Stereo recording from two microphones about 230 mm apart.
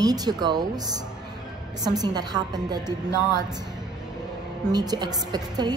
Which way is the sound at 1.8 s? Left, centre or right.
Centre.